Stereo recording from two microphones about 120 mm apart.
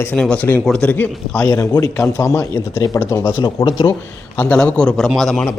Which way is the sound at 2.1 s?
25° left (ahead or behind).